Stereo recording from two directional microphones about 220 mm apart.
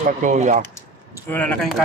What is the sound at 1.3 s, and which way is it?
Speech, 5° left (ahead or behind).